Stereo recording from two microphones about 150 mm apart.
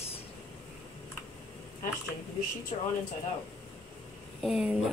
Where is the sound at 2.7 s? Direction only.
45° left (ahead or behind).